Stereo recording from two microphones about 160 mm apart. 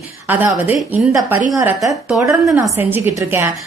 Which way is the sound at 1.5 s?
20° right (ahead or behind).